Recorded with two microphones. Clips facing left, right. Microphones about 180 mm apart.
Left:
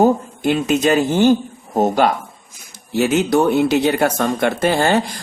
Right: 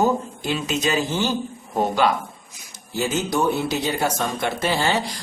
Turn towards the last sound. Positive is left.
turn(degrees=55)  # may be behind; listen again after turning